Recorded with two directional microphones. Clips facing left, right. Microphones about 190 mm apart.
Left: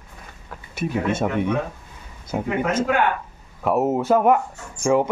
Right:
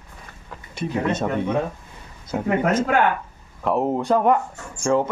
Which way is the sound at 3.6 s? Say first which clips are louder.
Left 1 dB; 5° left (ahead or behind).